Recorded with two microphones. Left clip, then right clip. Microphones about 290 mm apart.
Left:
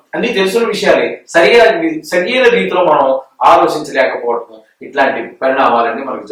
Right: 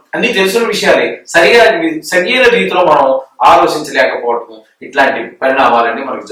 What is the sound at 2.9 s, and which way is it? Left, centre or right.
Speech, centre.